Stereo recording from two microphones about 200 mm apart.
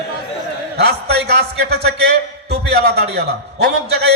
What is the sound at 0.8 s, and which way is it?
A man's voice, 55° right (ahead or behind).